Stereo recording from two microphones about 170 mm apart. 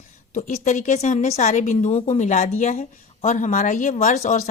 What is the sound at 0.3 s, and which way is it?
A woman's voice, 45° left (ahead or behind).